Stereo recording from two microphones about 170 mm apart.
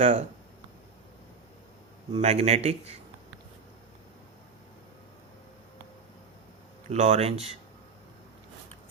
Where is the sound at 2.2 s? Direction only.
40° right (ahead or behind).